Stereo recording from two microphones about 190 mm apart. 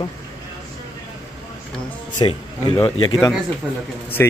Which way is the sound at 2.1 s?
20° left (ahead or behind).